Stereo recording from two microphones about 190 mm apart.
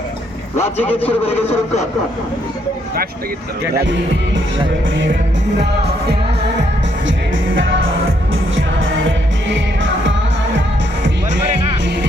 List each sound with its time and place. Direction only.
0.6 s a man's voice: 10° left (ahead or behind)
1.3 s a man's voice: 30° left (ahead or behind)